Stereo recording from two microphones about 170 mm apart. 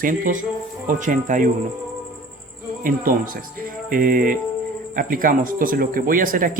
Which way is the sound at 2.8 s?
55° right (ahead or behind).